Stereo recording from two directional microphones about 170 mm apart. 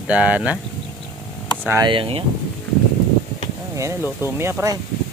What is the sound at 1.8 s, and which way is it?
Speech, 30° right (ahead or behind).